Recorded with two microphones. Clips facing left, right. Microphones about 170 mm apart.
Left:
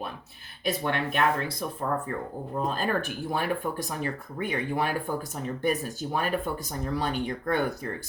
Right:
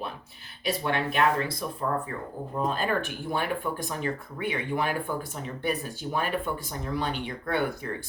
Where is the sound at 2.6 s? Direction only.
40° left (ahead or behind).